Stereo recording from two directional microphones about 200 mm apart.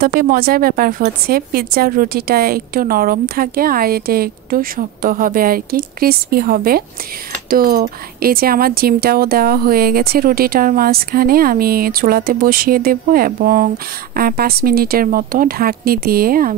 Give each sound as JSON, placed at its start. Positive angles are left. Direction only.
{"t": 0.0, "sound": "a woman's voice", "side_deg": -45}